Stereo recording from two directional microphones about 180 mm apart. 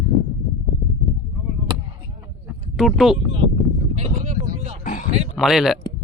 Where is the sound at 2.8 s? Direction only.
Centre (ahead or behind).